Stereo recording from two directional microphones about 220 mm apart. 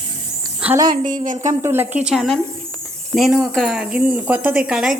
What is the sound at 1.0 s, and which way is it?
Speech, 35° right (ahead or behind).